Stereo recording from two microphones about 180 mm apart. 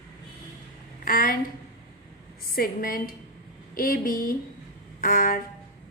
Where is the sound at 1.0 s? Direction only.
50° left (ahead or behind).